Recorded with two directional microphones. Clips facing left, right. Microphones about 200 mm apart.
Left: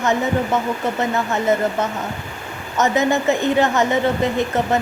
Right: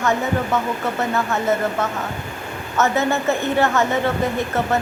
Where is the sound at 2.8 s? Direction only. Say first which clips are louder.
Left 2 dB; 15° left (ahead or behind).